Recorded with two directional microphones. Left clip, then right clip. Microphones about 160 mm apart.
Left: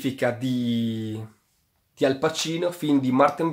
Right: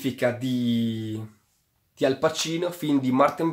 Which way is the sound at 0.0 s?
10° left (ahead or behind).